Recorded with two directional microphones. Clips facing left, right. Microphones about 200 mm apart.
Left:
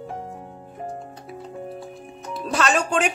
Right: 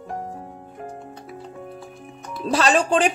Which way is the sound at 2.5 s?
35° right (ahead or behind).